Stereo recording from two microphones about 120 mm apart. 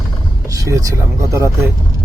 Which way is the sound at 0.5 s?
30° right (ahead or behind).